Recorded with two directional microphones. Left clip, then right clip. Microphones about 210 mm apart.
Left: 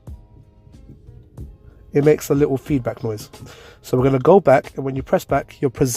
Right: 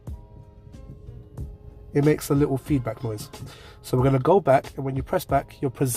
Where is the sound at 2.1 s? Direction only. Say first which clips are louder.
Left 7 dB; 45° left (ahead or behind).